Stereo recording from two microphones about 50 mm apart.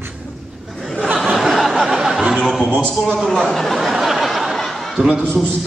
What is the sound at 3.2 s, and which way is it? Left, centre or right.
Speech, centre.